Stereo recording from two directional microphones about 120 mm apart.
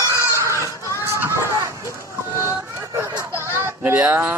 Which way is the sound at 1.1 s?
20° right (ahead or behind).